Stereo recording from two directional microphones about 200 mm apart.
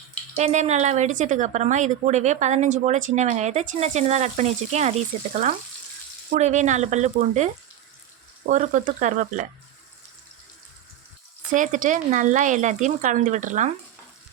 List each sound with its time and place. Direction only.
0.3 s speech: 35° right (ahead or behind)
6.3 s speech: 35° right (ahead or behind)
11.5 s speech: 40° right (ahead or behind)